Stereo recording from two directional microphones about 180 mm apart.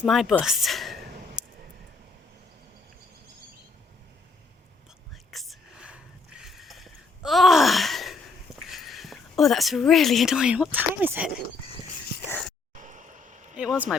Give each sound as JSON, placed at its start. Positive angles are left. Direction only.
{"t": 0.0, "sound": "a woman's voice", "side_deg": 0}
{"t": 5.3, "sound": "a sound", "side_deg": 0}
{"t": 8.7, "sound": "speech", "side_deg": 0}
{"t": 12.1, "sound": "a sound", "side_deg": 60}
{"t": 12.8, "sound": "vehicle", "side_deg": -45}
{"t": 13.6, "sound": "speech", "side_deg": -5}